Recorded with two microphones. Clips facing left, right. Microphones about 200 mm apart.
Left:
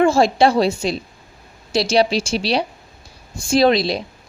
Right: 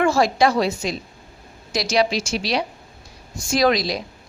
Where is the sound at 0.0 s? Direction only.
25° left (ahead or behind).